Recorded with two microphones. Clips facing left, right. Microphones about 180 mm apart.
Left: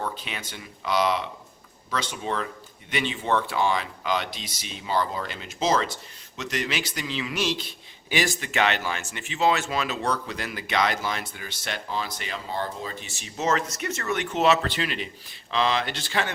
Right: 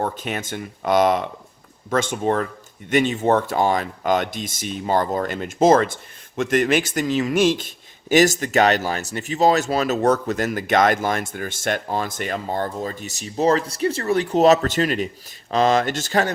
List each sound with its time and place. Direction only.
0.0 s speech: 45° right (ahead or behind)